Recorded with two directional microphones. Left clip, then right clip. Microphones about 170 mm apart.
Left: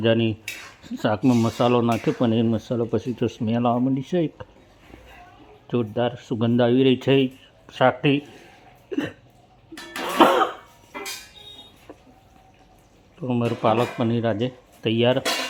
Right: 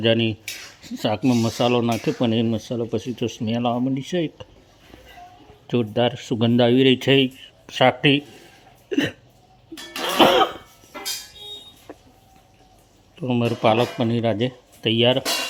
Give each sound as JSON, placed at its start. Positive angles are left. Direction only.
{"t": 0.0, "sound": "speech", "side_deg": -5}
{"t": 5.6, "sound": "speech", "side_deg": -10}
{"t": 8.9, "sound": "hiccup", "side_deg": -20}
{"t": 9.9, "sound": "music", "side_deg": -20}
{"t": 13.1, "sound": "speech", "side_deg": -10}